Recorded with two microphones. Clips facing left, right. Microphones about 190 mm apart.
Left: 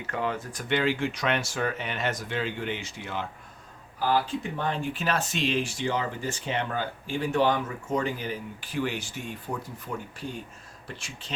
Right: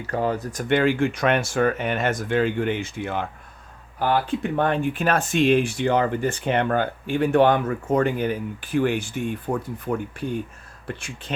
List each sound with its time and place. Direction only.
0.1 s speech: 40° right (ahead or behind); by 11.3 s 55° right (ahead or behind)